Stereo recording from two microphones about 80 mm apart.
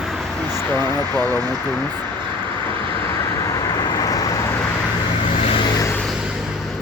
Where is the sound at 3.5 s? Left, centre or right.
Left.